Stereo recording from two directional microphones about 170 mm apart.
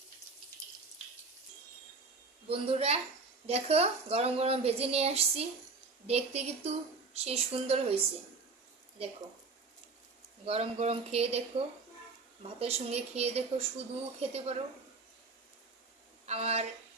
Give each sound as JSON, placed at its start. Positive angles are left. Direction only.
{"t": 2.5, "sound": "speech", "side_deg": -35}
{"t": 10.4, "sound": "speech", "side_deg": -35}
{"t": 16.2, "sound": "speech", "side_deg": -35}